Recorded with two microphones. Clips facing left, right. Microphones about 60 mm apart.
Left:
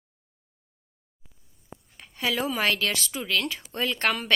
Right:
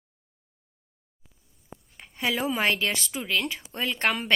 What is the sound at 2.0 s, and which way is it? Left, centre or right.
Speech, centre.